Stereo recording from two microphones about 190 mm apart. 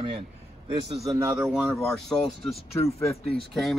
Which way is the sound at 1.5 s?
Centre (ahead or behind).